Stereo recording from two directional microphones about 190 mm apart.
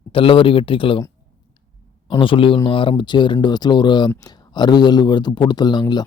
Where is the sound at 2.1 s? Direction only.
25° left (ahead or behind).